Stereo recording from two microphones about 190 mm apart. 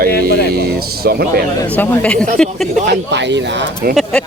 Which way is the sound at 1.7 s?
10° left (ahead or behind).